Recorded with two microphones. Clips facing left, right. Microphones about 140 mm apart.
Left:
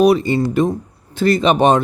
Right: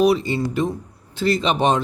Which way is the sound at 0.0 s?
55° left (ahead or behind).